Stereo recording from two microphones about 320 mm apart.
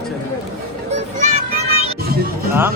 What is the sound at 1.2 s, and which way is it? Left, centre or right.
Music, centre.